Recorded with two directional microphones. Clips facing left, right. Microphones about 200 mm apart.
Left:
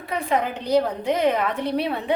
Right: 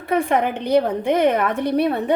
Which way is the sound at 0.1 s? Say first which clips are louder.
Right 5 dB; 55° right (ahead or behind).